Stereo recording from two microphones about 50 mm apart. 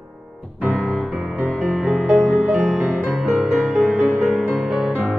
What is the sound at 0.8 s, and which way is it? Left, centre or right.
Music, centre.